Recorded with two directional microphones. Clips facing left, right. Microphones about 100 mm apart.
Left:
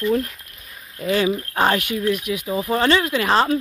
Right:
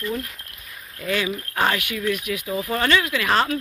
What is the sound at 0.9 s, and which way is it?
Speech, 30° left (ahead or behind).